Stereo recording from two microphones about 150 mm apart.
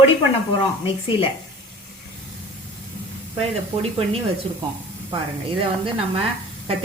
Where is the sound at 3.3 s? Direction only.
40° right (ahead or behind).